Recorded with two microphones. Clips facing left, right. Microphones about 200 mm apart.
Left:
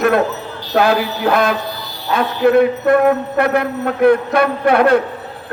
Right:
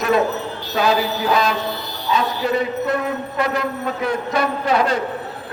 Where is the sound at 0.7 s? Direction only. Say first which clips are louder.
Left 4 dB; 55° left (ahead or behind).